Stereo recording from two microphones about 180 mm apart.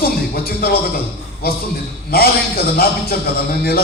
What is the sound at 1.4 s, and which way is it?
Speech, 60° left (ahead or behind).